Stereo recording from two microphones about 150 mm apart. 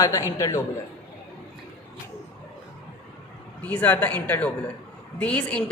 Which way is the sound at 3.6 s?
10° left (ahead or behind).